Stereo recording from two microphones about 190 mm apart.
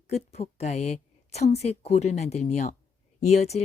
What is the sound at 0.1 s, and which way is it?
Speech, 35° left (ahead or behind).